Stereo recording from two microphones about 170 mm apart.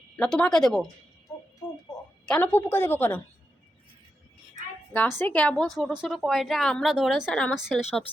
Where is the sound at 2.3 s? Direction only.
10° left (ahead or behind).